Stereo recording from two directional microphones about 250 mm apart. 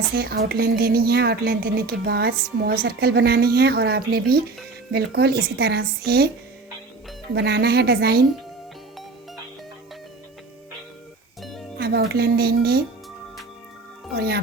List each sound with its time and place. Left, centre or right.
0.2 s speech: right
7.3 s speech: right
11.8 s speech: right
14.2 s speech: right